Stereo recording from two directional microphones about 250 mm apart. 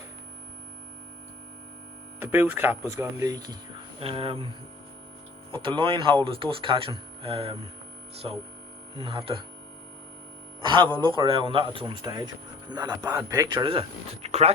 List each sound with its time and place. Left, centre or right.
2.1 s a man's voice: centre
5.5 s a man's voice: centre
9.0 s a man's voice: right
10.6 s a man's voice: centre